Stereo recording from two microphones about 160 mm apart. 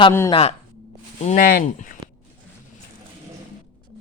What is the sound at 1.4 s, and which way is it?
Speech, 65° left (ahead or behind).